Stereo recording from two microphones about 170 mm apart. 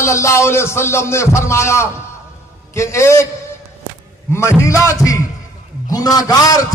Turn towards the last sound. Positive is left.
turn(degrees=20)  # may be behind; listen again after turning